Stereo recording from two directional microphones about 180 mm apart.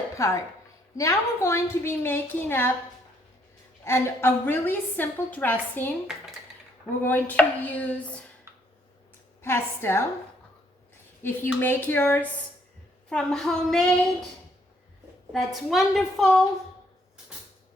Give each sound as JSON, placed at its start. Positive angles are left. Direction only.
{"t": 0.2, "sound": "a woman's voice", "side_deg": 15}
{"t": 3.8, "sound": "a woman's voice", "side_deg": 15}
{"t": 7.0, "sound": "a woman's voice", "side_deg": 10}
{"t": 9.4, "sound": "a woman's voice", "side_deg": 15}
{"t": 11.2, "sound": "a woman's voice", "side_deg": 10}
{"t": 15.3, "sound": "a woman's voice", "side_deg": 0}